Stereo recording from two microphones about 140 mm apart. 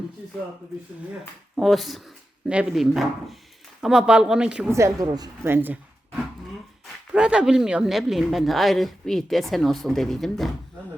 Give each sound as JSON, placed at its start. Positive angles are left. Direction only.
{"t": 1.5, "sound": "speech", "side_deg": 0}
{"t": 4.7, "sound": "a woman's voice", "side_deg": -25}
{"t": 5.5, "sound": "speech", "side_deg": -15}
{"t": 7.1, "sound": "speech", "side_deg": -5}